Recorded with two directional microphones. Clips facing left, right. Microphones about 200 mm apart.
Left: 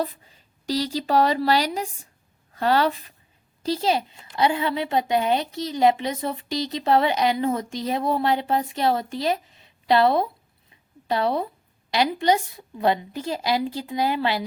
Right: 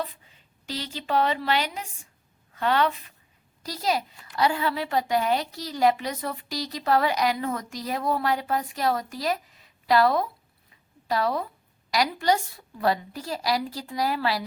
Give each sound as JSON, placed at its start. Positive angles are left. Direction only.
{"t": 0.0, "sound": "a woman's voice", "side_deg": 40}